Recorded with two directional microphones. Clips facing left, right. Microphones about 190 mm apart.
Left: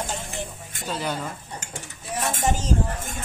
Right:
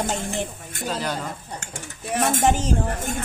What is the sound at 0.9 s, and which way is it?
Speech, centre (ahead or behind).